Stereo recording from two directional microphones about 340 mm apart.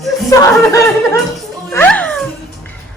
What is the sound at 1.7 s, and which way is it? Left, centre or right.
Music, centre.